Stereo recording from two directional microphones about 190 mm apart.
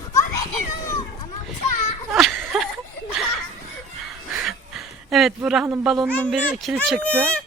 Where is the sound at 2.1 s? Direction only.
Centre (ahead or behind).